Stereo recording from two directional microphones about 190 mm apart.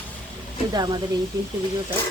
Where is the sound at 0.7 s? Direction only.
20° right (ahead or behind).